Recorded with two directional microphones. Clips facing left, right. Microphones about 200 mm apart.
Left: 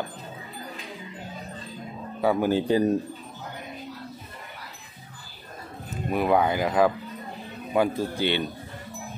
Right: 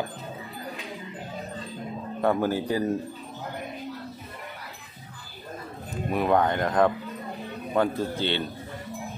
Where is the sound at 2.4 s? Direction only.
20° left (ahead or behind).